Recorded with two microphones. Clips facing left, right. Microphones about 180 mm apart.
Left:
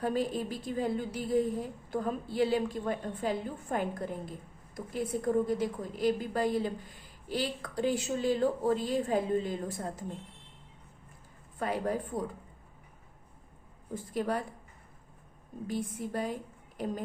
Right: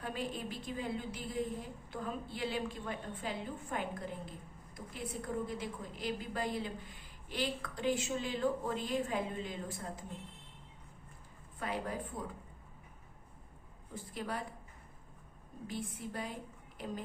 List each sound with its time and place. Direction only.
0.0 s a woman's voice: 40° left (ahead or behind)
11.6 s a woman's voice: 40° left (ahead or behind)
14.1 s a woman's voice: 45° left (ahead or behind)
15.6 s a woman's voice: 40° left (ahead or behind)